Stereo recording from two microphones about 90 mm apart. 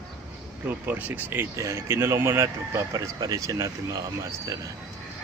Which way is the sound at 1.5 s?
35° right (ahead or behind).